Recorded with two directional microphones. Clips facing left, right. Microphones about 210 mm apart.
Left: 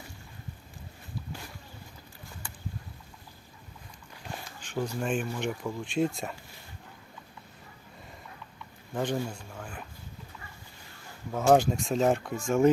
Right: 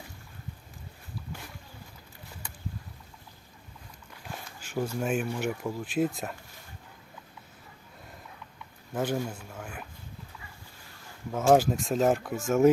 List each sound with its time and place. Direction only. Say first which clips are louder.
4.6 s speech: right 1 dB; 5° right (ahead or behind)
8.9 s speech: right 1 dB; 5° right (ahead or behind)
11.3 s speech: even; 5° right (ahead or behind)